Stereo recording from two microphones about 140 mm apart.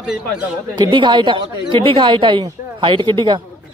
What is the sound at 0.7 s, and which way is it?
Speech, 30° right (ahead or behind).